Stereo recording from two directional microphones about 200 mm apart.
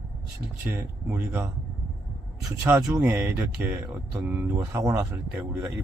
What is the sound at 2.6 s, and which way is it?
Speech, 15° right (ahead or behind).